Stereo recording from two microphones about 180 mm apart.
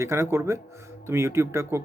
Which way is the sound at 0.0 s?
15° right (ahead or behind).